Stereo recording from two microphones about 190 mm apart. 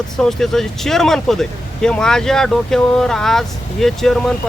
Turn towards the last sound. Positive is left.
turn(degrees=0)  # may be behind; listen again after turning